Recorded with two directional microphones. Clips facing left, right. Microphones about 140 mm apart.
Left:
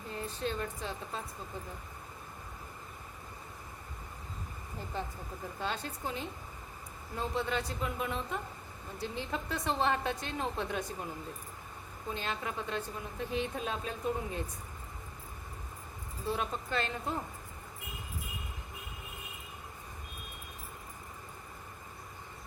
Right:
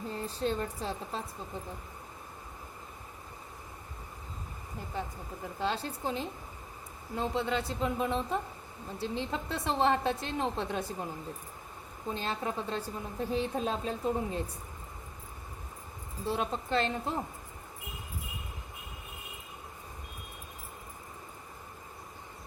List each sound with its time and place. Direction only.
0.1 s a woman's voice: 35° right (ahead or behind)
5.5 s a woman's voice: 30° right (ahead or behind)
12.1 s a woman's voice: 35° right (ahead or behind)
16.2 s a woman's voice: 25° right (ahead or behind)